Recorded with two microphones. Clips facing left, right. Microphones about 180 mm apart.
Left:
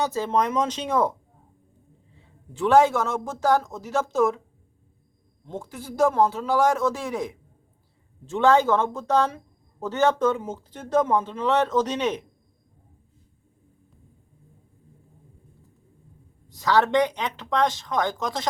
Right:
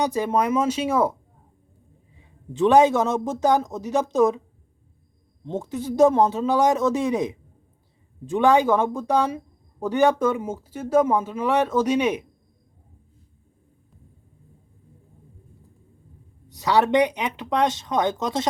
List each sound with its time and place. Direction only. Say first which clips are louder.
0.0 s speech: right 2 dB; 15° right (ahead or behind)
2.1 s a man's voice: right 8 dB; 15° right (ahead or behind)
5.5 s a man's voice: right 7 dB; 20° right (ahead or behind)
16.5 s speech: right 1 dB; 15° right (ahead or behind)